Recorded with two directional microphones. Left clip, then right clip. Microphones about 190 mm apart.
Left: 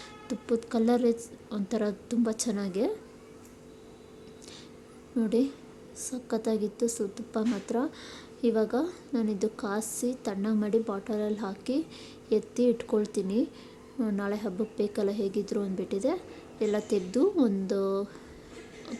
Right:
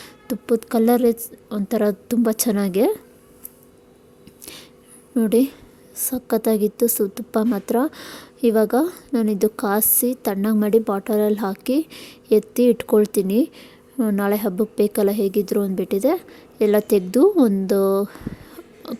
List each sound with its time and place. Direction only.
0.0 s a woman's voice: 45° right (ahead or behind)
5.1 s a woman's voice: 50° right (ahead or behind)
18.9 s a sound: 50° right (ahead or behind)